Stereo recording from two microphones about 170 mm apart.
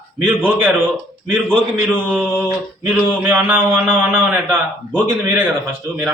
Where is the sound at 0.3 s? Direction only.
10° right (ahead or behind).